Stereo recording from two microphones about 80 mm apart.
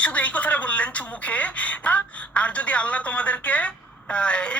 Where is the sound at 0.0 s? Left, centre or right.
Centre.